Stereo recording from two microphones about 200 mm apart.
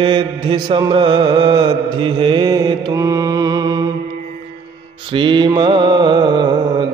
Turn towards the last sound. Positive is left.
turn(degrees=-20)  # may be behind; listen again after turning